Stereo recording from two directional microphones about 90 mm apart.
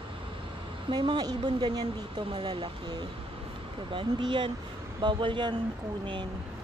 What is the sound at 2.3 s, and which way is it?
A woman's voice, 70° right (ahead or behind).